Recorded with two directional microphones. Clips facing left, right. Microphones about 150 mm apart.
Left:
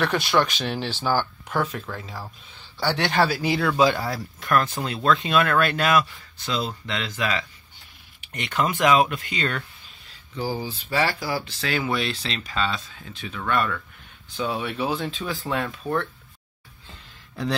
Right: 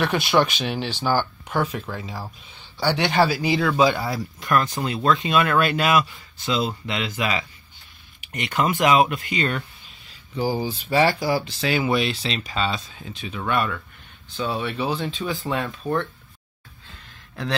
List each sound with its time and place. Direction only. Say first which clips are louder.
0.0 s speech: right 2 dB; 5° right (ahead or behind)
14.3 s speech: right 1 dB; 5° left (ahead or behind)